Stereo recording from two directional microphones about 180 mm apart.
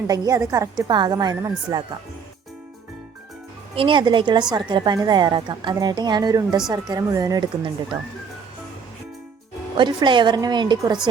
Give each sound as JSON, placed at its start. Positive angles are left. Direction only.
{"t": 0.1, "sound": "a woman's voice", "side_deg": -20}
{"t": 3.8, "sound": "a woman's voice", "side_deg": -25}
{"t": 9.7, "sound": "a woman's voice", "side_deg": -25}